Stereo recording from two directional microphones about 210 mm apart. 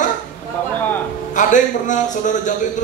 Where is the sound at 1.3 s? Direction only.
35° left (ahead or behind).